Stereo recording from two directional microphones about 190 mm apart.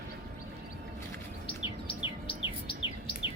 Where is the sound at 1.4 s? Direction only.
25° left (ahead or behind).